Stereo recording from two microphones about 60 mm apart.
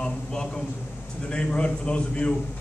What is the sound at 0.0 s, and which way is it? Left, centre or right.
A man's voice, centre.